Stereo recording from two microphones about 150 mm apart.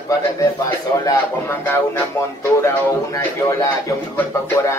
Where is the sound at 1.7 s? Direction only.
15° left (ahead or behind).